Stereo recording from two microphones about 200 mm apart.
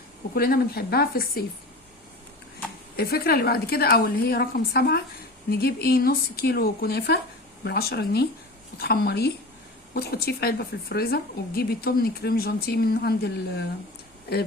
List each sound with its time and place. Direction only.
0.3 s speech: 50° left (ahead or behind)
2.9 s speech: 50° left (ahead or behind)